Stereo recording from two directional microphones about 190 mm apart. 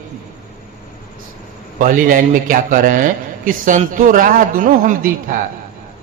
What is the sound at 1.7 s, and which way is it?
A man's voice, 45° right (ahead or behind).